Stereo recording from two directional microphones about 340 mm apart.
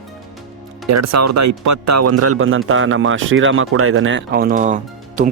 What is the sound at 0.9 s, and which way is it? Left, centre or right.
Speech, right.